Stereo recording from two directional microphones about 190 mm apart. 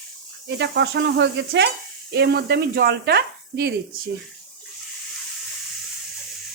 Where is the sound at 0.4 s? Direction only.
65° right (ahead or behind).